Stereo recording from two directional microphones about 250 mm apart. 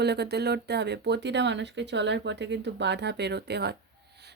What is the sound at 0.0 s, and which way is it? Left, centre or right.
Speech, right.